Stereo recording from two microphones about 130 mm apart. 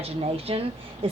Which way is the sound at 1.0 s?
45° right (ahead or behind).